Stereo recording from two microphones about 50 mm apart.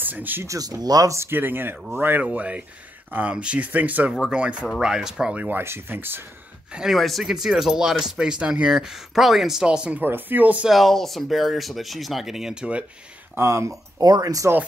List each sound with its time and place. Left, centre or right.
0.0 s speech: right
2.2 s speech: right
4.1 s speech: centre
4.6 s speech: centre
5.3 s speech: right
5.6 s speech: right
6.9 s speech: centre
9.6 s speech: centre
9.9 s speech: right
10.7 s speech: centre
13.4 s speech: right